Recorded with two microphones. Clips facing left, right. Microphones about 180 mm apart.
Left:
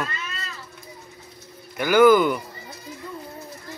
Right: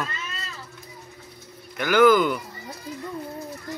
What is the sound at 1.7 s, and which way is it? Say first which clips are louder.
Speech: left 2 dB; 10° left (ahead or behind).